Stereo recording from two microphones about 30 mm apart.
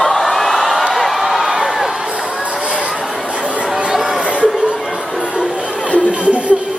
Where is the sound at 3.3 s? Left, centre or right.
Right.